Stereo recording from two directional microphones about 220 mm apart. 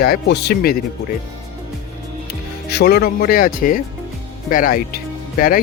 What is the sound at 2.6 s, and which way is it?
Speech, 45° left (ahead or behind).